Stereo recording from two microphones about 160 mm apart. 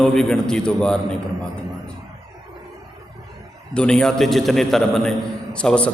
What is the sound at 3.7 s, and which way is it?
A man's voice, 5° left (ahead or behind).